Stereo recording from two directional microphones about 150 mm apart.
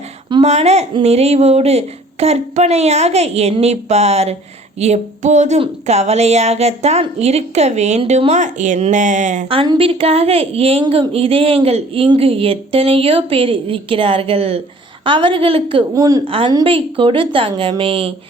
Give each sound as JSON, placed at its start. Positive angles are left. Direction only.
{"t": 0.4, "sound": "speech", "side_deg": -45}
{"t": 9.5, "sound": "a woman's voice", "side_deg": -35}
{"t": 16.0, "sound": "a woman's voice", "side_deg": -25}
{"t": 16.2, "sound": "a woman's voice", "side_deg": -35}